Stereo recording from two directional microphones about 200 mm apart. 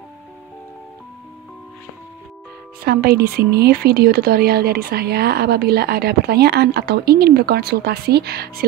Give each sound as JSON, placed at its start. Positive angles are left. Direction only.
{"t": 2.8, "sound": "speech", "side_deg": -50}